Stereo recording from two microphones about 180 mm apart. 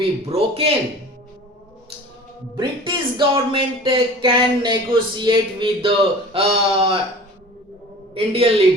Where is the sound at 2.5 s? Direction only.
25° right (ahead or behind).